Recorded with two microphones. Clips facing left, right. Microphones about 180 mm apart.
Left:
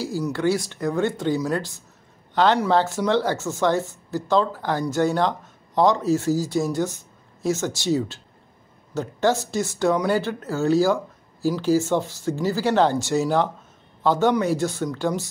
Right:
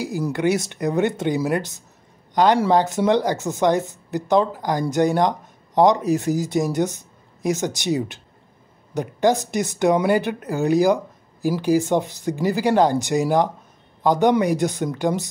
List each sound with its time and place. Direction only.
0.3 s speech: 20° right (ahead or behind)